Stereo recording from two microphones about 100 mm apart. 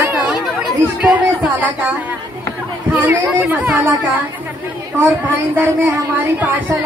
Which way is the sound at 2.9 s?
15° right (ahead or behind).